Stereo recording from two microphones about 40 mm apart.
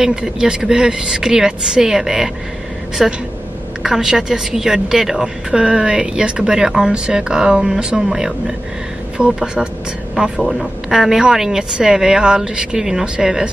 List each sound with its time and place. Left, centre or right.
0.0 s a woman's voice: centre